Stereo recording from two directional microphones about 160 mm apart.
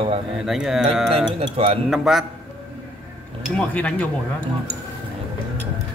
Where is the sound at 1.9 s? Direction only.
Centre (ahead or behind).